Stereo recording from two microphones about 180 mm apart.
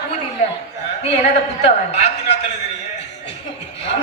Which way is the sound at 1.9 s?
40° left (ahead or behind).